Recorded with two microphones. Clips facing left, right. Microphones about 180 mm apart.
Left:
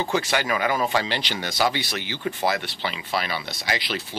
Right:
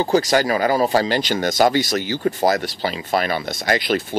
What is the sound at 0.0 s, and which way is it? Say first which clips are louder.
Speech: right 7 dB; 40° right (ahead or behind).